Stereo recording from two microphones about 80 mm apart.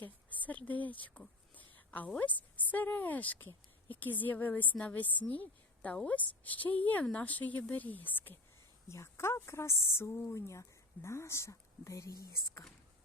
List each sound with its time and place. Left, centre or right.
0.0 s a sound: centre
2.0 s speech: centre
8.9 s speech: left
10.3 s speech: left